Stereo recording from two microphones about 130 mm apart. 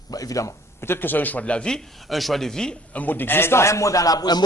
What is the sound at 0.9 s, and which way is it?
Speech, 15° left (ahead or behind).